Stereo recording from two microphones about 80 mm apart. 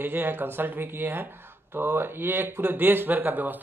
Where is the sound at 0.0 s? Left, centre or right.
Right.